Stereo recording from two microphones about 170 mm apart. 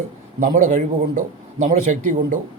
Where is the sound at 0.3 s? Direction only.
50° right (ahead or behind).